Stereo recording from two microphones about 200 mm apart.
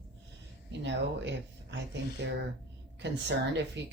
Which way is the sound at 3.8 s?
60° right (ahead or behind).